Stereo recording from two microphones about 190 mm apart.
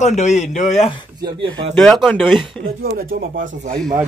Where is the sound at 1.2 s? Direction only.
25° right (ahead or behind).